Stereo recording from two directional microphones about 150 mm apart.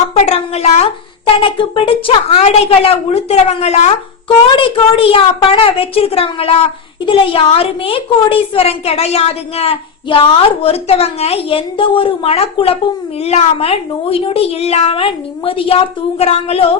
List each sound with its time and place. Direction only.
0.1 s a sound: 45° left (ahead or behind)
1.4 s a woman's voice: 35° left (ahead or behind)
4.5 s a child's voice: 35° left (ahead or behind)